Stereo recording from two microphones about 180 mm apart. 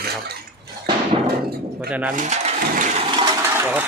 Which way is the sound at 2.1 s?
40° right (ahead or behind).